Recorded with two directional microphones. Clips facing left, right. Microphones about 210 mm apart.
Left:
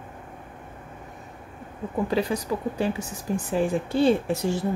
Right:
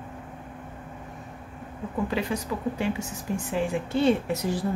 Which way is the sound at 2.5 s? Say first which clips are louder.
Left 1 dB; 40° left (ahead or behind).